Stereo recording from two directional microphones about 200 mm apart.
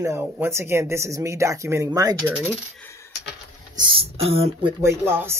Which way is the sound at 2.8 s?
15° left (ahead or behind).